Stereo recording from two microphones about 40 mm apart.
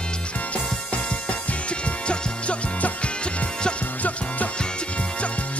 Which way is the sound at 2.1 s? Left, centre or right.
Left.